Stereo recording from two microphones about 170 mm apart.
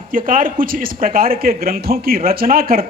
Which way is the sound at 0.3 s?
55° right (ahead or behind).